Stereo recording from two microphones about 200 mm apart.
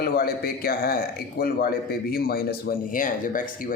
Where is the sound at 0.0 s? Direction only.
50° left (ahead or behind).